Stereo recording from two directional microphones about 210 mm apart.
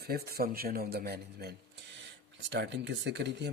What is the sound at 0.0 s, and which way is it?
Speech, 45° right (ahead or behind).